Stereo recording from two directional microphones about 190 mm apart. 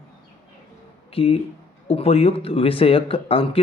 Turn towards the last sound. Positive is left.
turn(degrees=30)  # may be behind; listen again after turning